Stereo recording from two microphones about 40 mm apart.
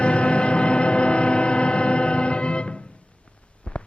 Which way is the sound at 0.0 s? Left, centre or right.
Left.